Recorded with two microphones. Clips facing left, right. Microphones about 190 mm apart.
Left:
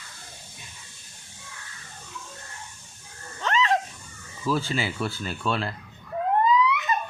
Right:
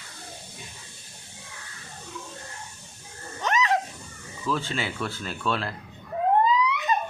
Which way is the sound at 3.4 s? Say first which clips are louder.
Even; 15° right (ahead or behind).